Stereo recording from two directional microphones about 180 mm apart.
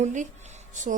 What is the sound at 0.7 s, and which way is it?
Speech, 45° right (ahead or behind).